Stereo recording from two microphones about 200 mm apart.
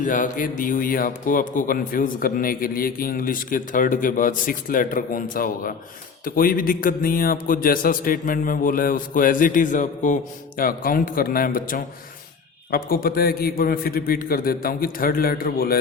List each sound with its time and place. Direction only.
0.0 s a man's voice: 40° left (ahead or behind)